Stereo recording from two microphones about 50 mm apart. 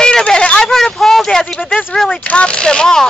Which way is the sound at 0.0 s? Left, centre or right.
Centre.